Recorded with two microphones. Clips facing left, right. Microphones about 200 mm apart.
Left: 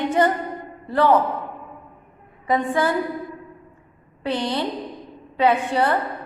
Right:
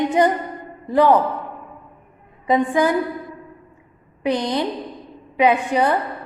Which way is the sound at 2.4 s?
15° right (ahead or behind).